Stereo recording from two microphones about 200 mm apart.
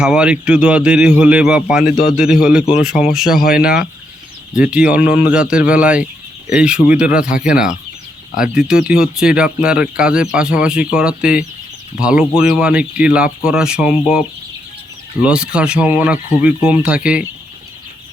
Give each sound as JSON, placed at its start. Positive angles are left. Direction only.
{"t": 0.0, "sound": "speech", "side_deg": -5}
{"t": 3.3, "sound": "speech", "side_deg": 45}
{"t": 4.7, "sound": "speech", "side_deg": -5}